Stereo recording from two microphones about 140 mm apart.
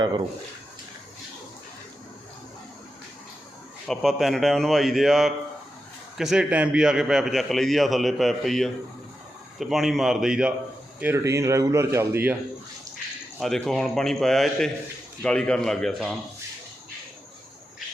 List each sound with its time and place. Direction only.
3.8 s a man's voice: centre (ahead or behind)
11.0 s speech: 20° right (ahead or behind)
13.4 s a man's voice: centre (ahead or behind)